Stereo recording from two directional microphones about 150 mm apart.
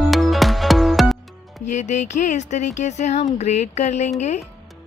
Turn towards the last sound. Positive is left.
turn(degrees=50)  # may be behind; listen again after turning